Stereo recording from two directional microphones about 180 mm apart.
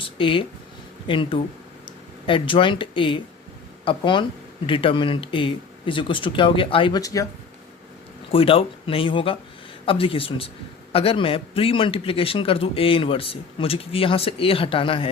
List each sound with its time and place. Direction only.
0.0 s speech: 30° left (ahead or behind)
8.3 s speech: 30° left (ahead or behind)